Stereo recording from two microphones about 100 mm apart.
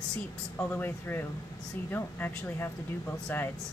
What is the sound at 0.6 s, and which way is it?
Speech, 20° left (ahead or behind).